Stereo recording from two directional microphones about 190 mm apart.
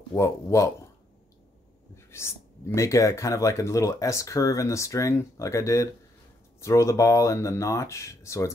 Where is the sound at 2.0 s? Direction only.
15° left (ahead or behind).